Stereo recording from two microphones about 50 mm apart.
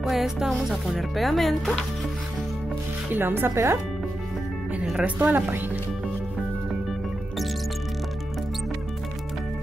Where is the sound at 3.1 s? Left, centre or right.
Right.